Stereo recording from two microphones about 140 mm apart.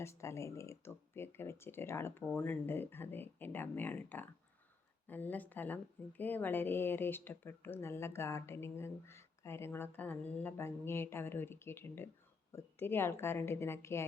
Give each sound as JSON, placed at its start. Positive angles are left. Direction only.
{"t": 0.0, "sound": "a woman's voice", "side_deg": 20}